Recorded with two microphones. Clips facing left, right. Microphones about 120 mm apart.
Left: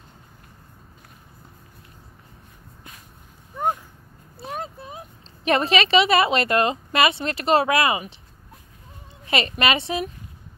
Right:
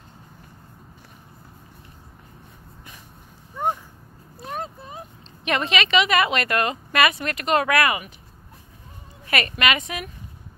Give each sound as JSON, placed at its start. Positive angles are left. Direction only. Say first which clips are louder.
{"t": 4.5, "sound": "vehicle", "louder": "even", "side_deg": 0}
{"t": 5.4, "sound": "speech", "louder": "left 4 dB", "side_deg": 35}
{"t": 9.3, "sound": "a woman's voice", "louder": "left 1 dB", "side_deg": 30}